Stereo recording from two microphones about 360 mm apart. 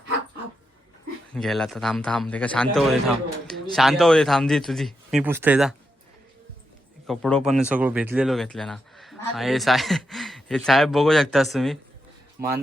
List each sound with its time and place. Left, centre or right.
1.3 s speech: centre
7.1 s speech: centre
12.4 s speech: right